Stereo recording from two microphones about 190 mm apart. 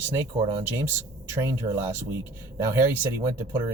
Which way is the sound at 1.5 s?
15° right (ahead or behind).